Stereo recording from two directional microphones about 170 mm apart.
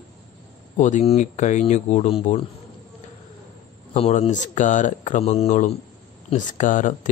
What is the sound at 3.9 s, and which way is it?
Speech, 40° left (ahead or behind).